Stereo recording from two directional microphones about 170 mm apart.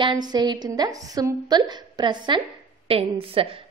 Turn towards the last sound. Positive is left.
turn(degrees=-35)  # may be behind; listen again after turning